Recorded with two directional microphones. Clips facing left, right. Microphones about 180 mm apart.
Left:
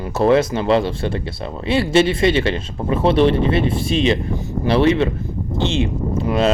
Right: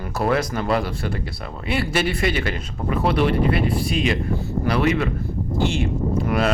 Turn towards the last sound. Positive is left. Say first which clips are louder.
# left 3 dB
turn(degrees=25)  # may be behind; listen again after turning